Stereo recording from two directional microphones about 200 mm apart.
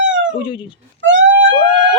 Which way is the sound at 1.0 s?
70° right (ahead or behind).